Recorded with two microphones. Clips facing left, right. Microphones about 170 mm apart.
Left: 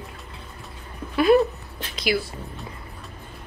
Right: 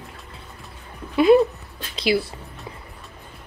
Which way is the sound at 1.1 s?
20° right (ahead or behind).